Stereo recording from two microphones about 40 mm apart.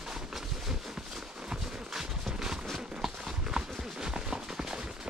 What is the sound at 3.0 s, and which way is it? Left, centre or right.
Clip-clop, centre.